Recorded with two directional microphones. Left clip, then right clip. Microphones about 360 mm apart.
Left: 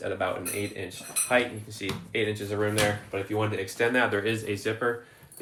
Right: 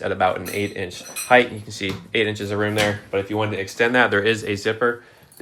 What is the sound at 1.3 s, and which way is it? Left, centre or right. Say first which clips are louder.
Speech: right 10 dB; right.